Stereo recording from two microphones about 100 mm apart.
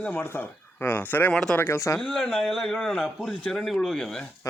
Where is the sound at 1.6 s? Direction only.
25° left (ahead or behind).